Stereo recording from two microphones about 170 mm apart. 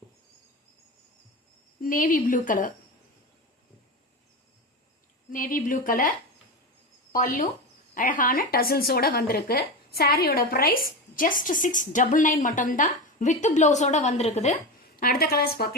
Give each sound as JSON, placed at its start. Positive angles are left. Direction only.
{"t": 1.8, "sound": "a woman's voice", "side_deg": 55}
{"t": 5.3, "sound": "a woman's voice", "side_deg": 55}